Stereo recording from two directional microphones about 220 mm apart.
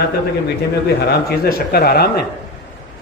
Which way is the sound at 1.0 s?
45° left (ahead or behind).